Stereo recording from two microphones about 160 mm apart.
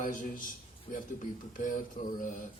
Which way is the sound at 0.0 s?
55° left (ahead or behind).